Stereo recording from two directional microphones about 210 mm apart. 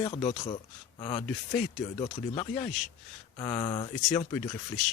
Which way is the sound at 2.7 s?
Centre (ahead or behind).